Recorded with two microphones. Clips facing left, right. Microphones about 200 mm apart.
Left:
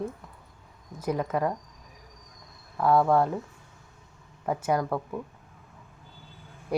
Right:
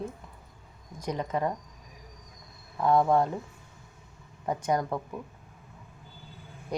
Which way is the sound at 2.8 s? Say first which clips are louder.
Left 1 dB; 20° right (ahead or behind).